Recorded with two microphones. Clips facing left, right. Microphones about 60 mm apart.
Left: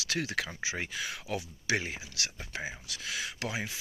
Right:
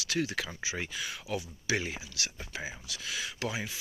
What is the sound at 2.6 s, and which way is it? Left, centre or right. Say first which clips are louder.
Speech: left 1 dB; left.